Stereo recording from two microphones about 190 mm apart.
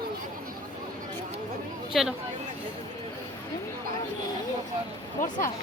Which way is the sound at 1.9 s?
Centre (ahead or behind).